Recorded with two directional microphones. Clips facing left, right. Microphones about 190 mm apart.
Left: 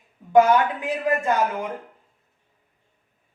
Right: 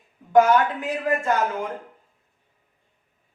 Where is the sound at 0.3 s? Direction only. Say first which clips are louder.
Even; 15° left (ahead or behind).